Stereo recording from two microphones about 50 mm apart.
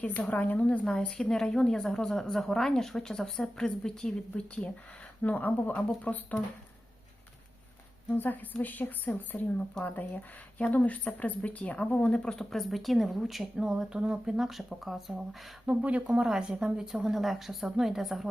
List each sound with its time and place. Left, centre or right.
0.0 s speech: left
0.9 s a woman's voice: centre
4.4 s speech: left
5.2 s speech: left
8.1 s speech: left
10.8 s a woman's voice: left; by 15.1 s centre
15.6 s a woman's voice: right; by 18.3 s centre